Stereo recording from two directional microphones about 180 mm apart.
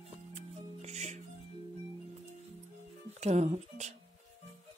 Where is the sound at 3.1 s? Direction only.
40° right (ahead or behind).